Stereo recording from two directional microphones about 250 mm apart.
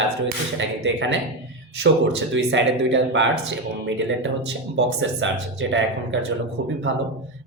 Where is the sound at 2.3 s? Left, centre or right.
Right.